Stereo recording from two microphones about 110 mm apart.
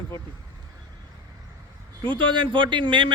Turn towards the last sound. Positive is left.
turn(degrees=-50)  # may be behind; listen again after turning